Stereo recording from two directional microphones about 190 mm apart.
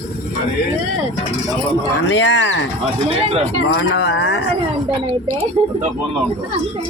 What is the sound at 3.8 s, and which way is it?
Speech, 70° left (ahead or behind).